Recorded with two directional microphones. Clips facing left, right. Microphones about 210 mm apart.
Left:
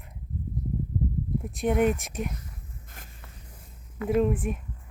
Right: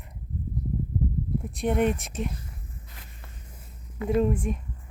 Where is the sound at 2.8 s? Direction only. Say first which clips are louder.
Left 1 dB; 45° left (ahead or behind).